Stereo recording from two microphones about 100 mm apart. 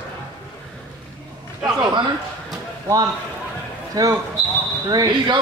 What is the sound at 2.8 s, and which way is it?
Speech, 35° right (ahead or behind).